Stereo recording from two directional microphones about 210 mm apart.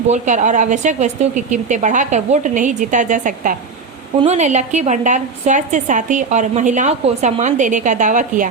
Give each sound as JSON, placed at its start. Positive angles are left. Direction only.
{"t": 0.1, "sound": "a woman's voice", "side_deg": -35}